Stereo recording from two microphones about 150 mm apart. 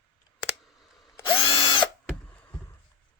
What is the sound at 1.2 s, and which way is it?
Drill, 40° left (ahead or behind).